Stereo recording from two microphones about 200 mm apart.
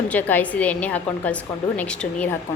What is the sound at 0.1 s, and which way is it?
A woman's voice, 10° left (ahead or behind).